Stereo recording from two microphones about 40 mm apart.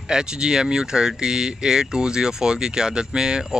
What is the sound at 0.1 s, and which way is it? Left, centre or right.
Speech, centre.